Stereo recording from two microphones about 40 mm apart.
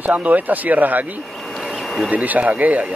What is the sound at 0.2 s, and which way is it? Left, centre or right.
Speech, right.